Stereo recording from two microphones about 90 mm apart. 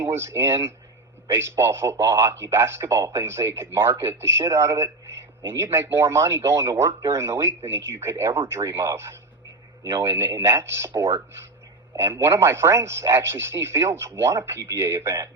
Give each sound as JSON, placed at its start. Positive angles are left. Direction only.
{"t": 0.0, "sound": "a man's voice", "side_deg": -25}